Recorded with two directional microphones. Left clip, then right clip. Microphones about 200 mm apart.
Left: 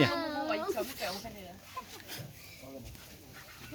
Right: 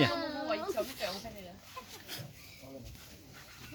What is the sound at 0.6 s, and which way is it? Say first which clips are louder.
Snake: left 1 dB; 25° left (ahead or behind).